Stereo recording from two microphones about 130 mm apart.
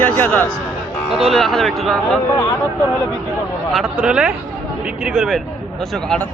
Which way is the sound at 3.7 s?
5° right (ahead or behind).